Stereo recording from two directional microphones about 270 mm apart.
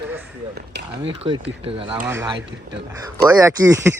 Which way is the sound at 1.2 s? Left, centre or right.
Centre.